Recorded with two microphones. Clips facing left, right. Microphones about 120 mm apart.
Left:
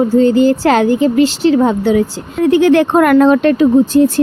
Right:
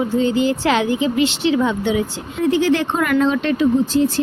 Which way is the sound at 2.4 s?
55° left (ahead or behind).